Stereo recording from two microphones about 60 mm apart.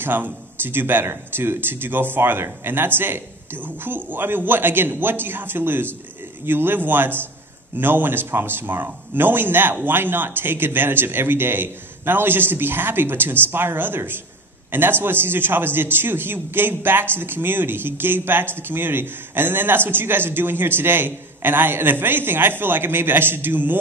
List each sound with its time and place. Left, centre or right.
0.0 s a man's voice: right